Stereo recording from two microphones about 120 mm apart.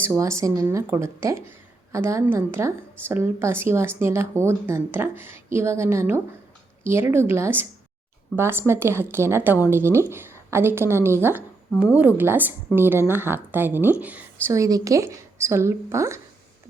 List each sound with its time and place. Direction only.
0.2 s a woman's voice: 25° right (ahead or behind)
14.4 s speech: 25° right (ahead or behind)